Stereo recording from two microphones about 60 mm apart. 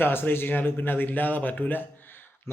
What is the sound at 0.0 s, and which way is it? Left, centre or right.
A man's voice, left.